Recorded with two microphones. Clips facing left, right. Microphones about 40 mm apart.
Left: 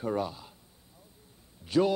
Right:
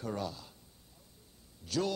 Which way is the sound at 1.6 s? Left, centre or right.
Left.